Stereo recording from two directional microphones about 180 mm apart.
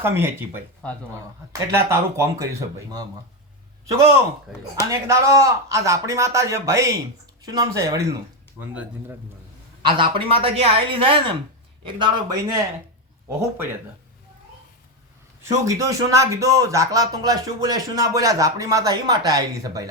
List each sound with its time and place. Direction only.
0.0 s a man's voice: 10° right (ahead or behind)
4.9 s a man's voice: 15° right (ahead or behind)
9.8 s speech: 30° right (ahead or behind)
15.4 s speech: 20° right (ahead or behind)